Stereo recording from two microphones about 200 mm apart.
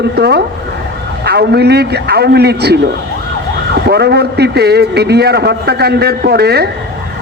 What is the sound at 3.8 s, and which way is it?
A man's voice, 55° right (ahead or behind).